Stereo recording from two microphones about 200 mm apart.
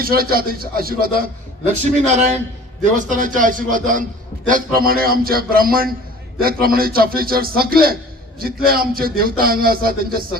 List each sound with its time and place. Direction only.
0.0 s a man's voice: 50° right (ahead or behind)
2.0 s a man's voice: 35° right (ahead or behind)